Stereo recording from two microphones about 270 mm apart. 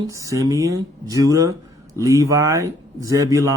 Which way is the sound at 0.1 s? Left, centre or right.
Centre.